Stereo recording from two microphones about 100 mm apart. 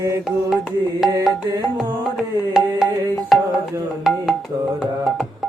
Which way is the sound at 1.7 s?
5° right (ahead or behind).